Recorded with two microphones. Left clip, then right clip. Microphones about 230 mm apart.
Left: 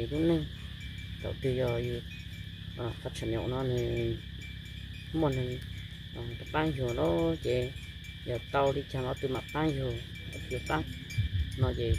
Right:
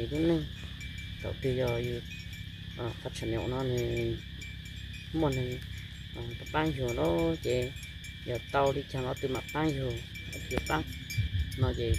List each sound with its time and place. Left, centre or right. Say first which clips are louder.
0.1 s speech: even; centre
5.1 s speech: even; centre
11.5 s cricket: even; centre